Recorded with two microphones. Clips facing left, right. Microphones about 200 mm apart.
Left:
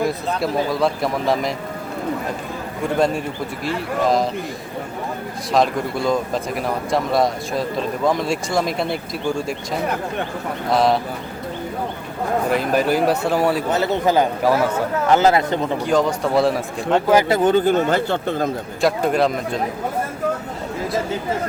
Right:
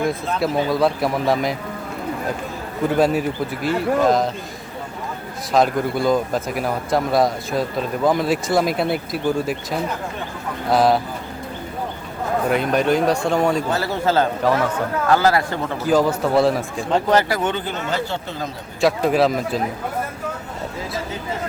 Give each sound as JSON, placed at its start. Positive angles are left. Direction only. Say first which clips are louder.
{"t": 0.3, "sound": "speech", "louder": "right 3 dB", "side_deg": 0}
{"t": 3.0, "sound": "speech", "louder": "right 2 dB", "side_deg": -5}
{"t": 5.5, "sound": "speech", "louder": "right 1 dB", "side_deg": 0}
{"t": 10.7, "sound": "speech", "louder": "right 1 dB", "side_deg": 0}
{"t": 12.5, "sound": "speech", "louder": "right 1 dB", "side_deg": 0}
{"t": 13.7, "sound": "a man's voice", "louder": "left 2 dB", "side_deg": 20}
{"t": 15.8, "sound": "a man's voice", "louder": "right 4 dB", "side_deg": -5}
{"t": 17.2, "sound": "speech", "louder": "left 5 dB", "side_deg": 25}
{"t": 17.5, "sound": "speech", "louder": "left 9 dB", "side_deg": 50}
{"t": 18.8, "sound": "speech", "louder": "right 1 dB", "side_deg": 0}